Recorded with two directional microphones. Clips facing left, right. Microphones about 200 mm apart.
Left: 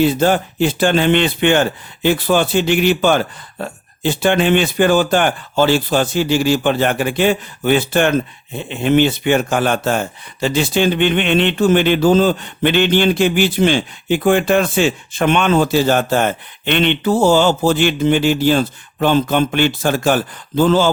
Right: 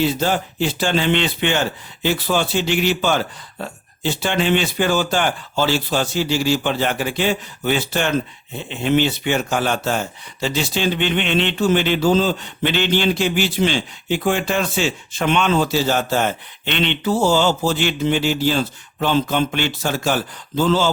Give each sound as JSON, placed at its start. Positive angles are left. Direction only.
{"t": 0.0, "sound": "speech", "side_deg": 55}